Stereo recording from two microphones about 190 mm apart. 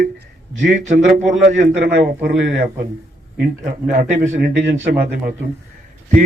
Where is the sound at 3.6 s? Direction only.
45° right (ahead or behind).